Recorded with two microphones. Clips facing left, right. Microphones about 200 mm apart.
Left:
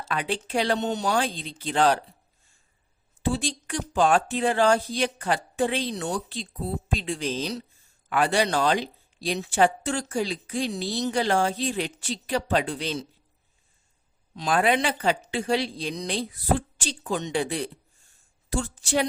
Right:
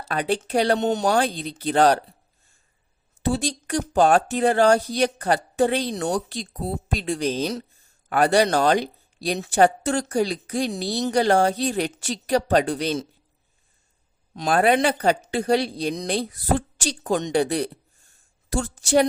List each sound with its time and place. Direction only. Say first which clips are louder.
0.0 s speech: right 5 dB; 40° right (ahead or behind)
3.2 s speech: right 3 dB; 40° right (ahead or behind)
14.3 s speech: right 4 dB; 45° right (ahead or behind)